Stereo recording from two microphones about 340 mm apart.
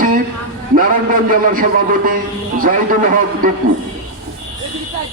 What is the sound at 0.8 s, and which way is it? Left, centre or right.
A man's voice, right.